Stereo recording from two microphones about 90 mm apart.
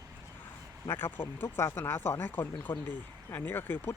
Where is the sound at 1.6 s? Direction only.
30° left (ahead or behind).